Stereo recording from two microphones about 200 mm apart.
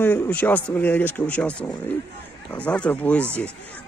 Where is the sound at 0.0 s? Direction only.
5° left (ahead or behind).